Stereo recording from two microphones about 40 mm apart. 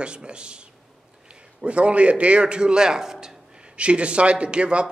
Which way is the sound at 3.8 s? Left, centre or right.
Right.